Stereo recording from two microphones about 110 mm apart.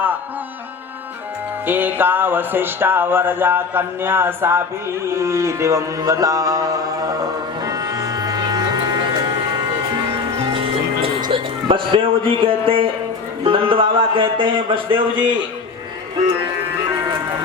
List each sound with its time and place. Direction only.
1.6 s music: 15° right (ahead or behind); by 9.6 s 40° right (ahead or behind)
11.2 s a man's voice: 50° right (ahead or behind)